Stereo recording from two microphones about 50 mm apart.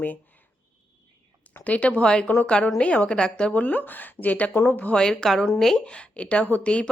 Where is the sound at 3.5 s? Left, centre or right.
Left.